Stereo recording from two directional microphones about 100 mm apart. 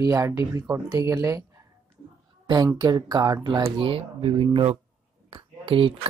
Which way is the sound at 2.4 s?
45° right (ahead or behind).